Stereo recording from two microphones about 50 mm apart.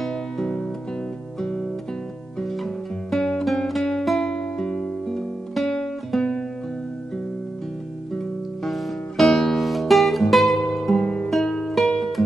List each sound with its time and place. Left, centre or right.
0.0 s music: centre
2.4 s music: centre; by 4.8 s left
5.0 s music: centre
8.1 s music: centre
11.0 s music: centre
11.2 s music: centre